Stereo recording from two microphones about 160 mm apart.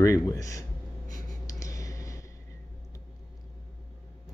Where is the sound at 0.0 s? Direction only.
20° left (ahead or behind).